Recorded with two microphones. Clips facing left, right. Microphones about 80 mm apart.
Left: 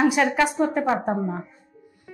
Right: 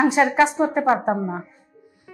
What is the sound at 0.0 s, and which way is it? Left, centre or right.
Speech, centre.